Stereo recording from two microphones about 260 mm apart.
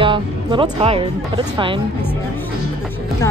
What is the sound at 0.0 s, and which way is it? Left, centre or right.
Speech, centre.